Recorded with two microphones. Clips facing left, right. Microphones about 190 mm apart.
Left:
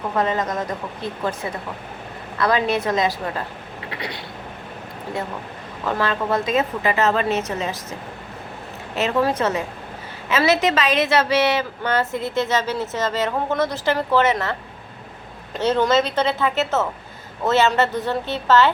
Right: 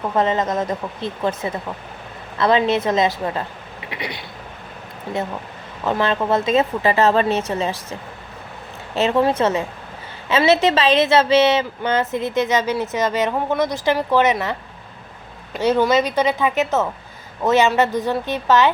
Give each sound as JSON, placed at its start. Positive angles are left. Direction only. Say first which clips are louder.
{"t": 0.2, "sound": "a woman's voice", "louder": "right 3 dB", "side_deg": -25}
{"t": 3.8, "sound": "a sound", "louder": "right 2 dB", "side_deg": -15}
{"t": 5.8, "sound": "a woman's voice", "louder": "right 3 dB", "side_deg": -25}
{"t": 9.0, "sound": "a woman's voice", "louder": "right 3 dB", "side_deg": -25}
{"t": 15.5, "sound": "a woman's voice", "louder": "right 2 dB", "side_deg": -10}